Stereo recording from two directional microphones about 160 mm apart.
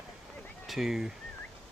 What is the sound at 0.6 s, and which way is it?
Speech, centre (ahead or behind).